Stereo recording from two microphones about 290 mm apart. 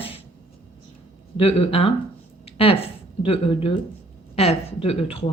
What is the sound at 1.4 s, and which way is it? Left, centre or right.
Speech, centre.